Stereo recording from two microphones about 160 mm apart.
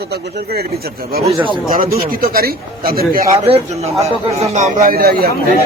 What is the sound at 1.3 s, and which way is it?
Speech, 30° right (ahead or behind).